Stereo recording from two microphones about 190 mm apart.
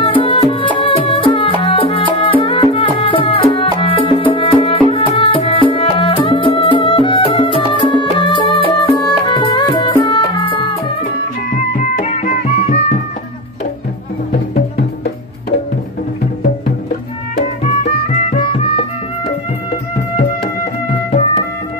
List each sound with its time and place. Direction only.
0.0 s music: 30° left (ahead or behind)
11.5 s music: 40° left (ahead or behind)
17.8 s music: 40° left (ahead or behind)